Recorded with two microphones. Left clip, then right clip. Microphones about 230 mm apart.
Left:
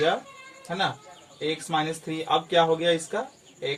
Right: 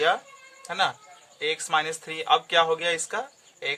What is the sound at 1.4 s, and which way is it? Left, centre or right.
Speech, right.